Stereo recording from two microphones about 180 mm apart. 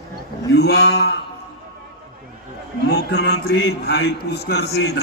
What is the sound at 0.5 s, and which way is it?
Speech, 65° left (ahead or behind).